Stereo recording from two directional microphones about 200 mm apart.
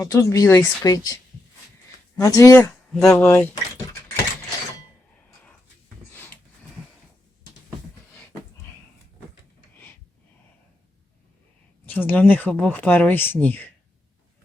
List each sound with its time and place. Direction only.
0.0 s speech: 15° left (ahead or behind)
2.9 s speech: 5° left (ahead or behind)
8.1 s beatboxing: 10° left (ahead or behind)
11.9 s speech: 10° left (ahead or behind)